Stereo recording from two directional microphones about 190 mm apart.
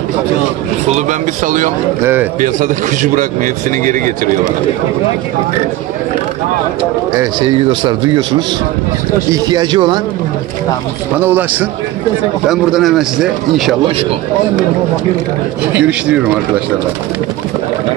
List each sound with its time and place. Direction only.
0.8 s speech: 40° right (ahead or behind)
7.2 s a man's voice: 25° right (ahead or behind)
11.1 s speech: 10° right (ahead or behind)
12.4 s a man's voice: centre (ahead or behind)
15.7 s a man's voice: 5° right (ahead or behind)